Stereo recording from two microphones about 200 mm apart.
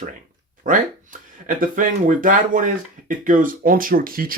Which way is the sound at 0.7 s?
45° right (ahead or behind).